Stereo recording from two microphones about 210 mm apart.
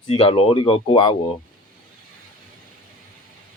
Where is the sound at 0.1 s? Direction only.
25° left (ahead or behind).